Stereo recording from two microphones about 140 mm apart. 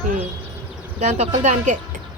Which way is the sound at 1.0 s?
50° right (ahead or behind).